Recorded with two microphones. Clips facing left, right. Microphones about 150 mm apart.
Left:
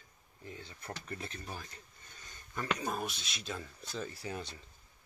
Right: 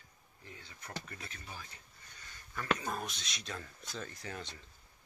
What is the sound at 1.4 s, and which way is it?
Speech, 45° left (ahead or behind).